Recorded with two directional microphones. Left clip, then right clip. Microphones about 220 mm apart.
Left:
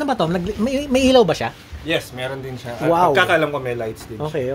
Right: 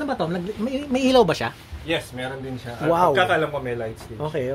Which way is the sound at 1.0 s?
Centre (ahead or behind).